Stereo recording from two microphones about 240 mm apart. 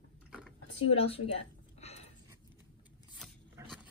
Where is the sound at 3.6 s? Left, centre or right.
Centre.